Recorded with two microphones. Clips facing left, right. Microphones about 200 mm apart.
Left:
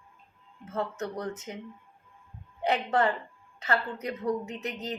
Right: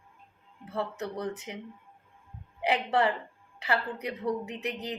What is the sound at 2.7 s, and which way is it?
Speech, 15° right (ahead or behind).